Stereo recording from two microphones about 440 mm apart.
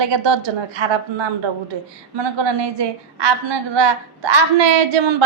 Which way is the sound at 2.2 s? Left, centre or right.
Right.